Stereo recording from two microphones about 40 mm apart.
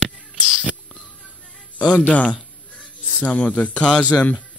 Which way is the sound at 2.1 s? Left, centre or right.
Left.